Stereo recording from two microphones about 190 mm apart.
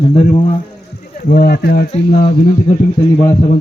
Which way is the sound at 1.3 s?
50° left (ahead or behind).